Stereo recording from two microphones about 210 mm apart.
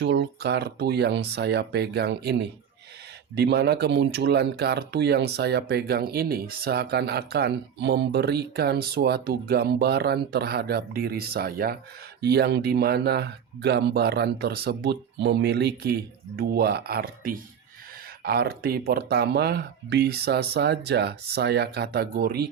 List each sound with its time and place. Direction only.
0.0 s speech: 55° right (ahead or behind)